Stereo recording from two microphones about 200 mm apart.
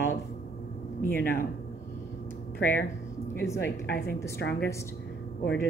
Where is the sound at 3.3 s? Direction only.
10° left (ahead or behind).